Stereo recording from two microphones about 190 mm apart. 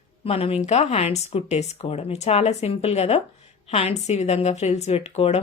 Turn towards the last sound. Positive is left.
turn(degrees=35)  # may be behind; listen again after turning